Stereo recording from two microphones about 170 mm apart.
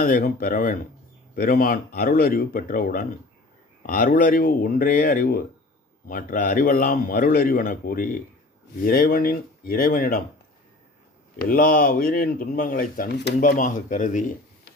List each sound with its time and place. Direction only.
0.0 s a man's voice: 55° left (ahead or behind)
11.3 s a man's voice: 55° left (ahead or behind)